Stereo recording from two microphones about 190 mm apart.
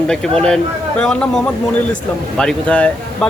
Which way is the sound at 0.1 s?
5° left (ahead or behind).